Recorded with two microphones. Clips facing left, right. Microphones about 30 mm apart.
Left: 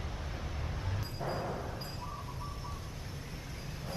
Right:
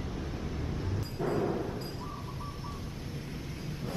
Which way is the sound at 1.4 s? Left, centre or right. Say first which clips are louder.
Right 6 dB; centre.